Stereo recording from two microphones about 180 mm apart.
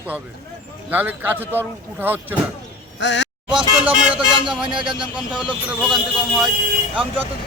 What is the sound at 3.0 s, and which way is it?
Speech, 85° left.